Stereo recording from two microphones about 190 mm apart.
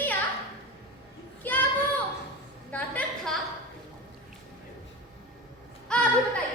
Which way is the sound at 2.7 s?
5° left (ahead or behind).